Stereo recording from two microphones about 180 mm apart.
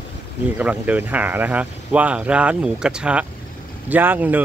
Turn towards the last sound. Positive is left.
turn(degrees=-10)  # may be behind; listen again after turning